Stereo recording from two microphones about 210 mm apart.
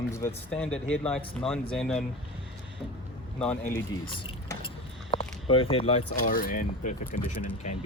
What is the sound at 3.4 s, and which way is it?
Speech, 10° left (ahead or behind).